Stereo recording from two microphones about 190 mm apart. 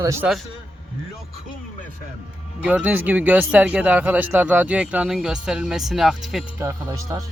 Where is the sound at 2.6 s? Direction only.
5° right (ahead or behind).